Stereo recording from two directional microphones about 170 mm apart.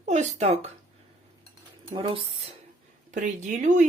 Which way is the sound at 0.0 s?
45° right (ahead or behind).